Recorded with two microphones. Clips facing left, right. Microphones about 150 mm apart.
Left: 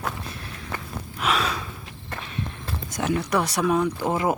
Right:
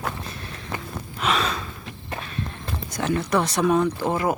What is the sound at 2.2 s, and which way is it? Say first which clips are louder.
Walk: even; 15° left (ahead or behind).